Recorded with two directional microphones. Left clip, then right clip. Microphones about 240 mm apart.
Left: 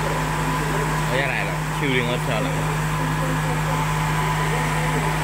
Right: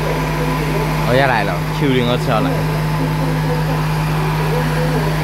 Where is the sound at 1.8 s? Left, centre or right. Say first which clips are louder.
Right 6 dB; centre.